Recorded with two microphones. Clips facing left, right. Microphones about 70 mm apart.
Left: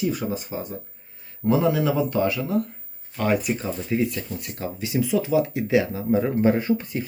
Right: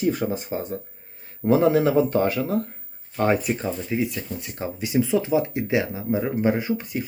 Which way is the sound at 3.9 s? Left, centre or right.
Centre.